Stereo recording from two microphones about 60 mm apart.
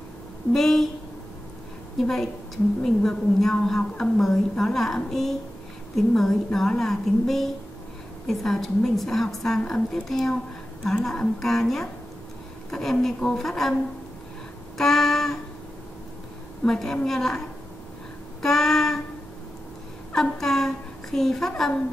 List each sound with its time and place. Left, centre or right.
0.5 s a woman's voice: centre
2.0 s a child's voice: centre
14.8 s child singing: centre
16.6 s a child's voice: centre
18.4 s a sound: centre
20.2 s a child's voice: centre